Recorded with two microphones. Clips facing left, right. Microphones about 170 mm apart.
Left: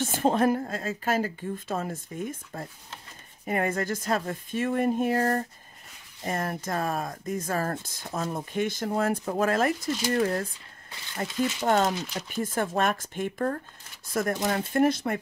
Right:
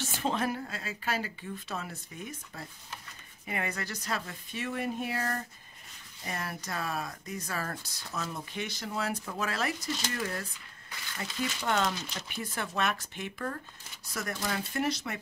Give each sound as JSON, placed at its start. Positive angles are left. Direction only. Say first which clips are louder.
{"t": 0.0, "sound": "speech", "louder": "left 8 dB", "side_deg": 50}